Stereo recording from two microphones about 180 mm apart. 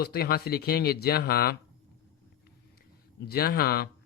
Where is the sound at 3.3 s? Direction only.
60° left (ahead or behind).